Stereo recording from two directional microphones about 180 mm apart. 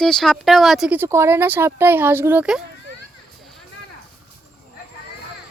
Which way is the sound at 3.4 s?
Centre (ahead or behind).